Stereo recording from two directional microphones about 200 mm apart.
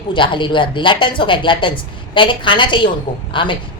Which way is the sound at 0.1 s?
25° left (ahead or behind).